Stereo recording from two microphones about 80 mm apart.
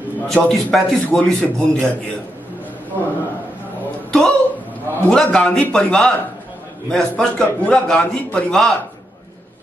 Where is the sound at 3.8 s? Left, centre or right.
Centre.